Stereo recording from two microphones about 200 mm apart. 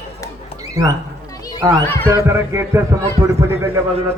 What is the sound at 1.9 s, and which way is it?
Speech, 10° left (ahead or behind).